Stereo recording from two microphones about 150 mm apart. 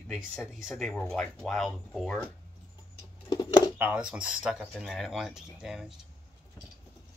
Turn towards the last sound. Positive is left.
turn(degrees=-5)  # may be behind; listen again after turning